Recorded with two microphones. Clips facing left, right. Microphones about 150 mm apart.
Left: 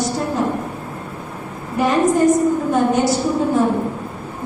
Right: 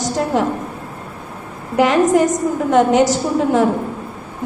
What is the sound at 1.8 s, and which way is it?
A woman's voice, 90° right.